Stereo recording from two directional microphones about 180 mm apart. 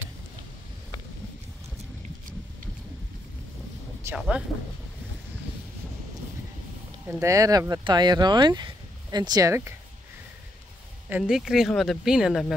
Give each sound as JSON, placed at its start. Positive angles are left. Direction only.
{"t": 4.0, "sound": "speech", "side_deg": -10}
{"t": 7.1, "sound": "speech", "side_deg": -15}
{"t": 11.1, "sound": "speech", "side_deg": -5}